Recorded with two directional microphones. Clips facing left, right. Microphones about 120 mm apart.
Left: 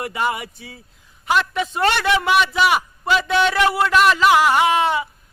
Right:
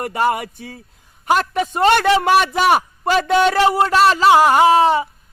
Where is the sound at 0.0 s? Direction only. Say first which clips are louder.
Right 4 dB; 45° right (ahead or behind).